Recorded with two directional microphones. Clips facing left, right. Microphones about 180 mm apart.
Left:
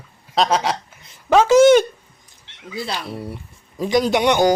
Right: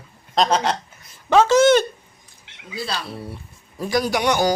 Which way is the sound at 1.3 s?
10° left (ahead or behind).